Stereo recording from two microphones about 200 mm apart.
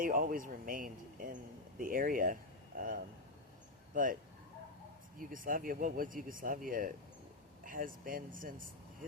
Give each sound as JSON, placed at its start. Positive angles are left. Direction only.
{"t": 0.0, "sound": "a man's voice", "side_deg": -40}
{"t": 5.3, "sound": "a man's voice", "side_deg": -45}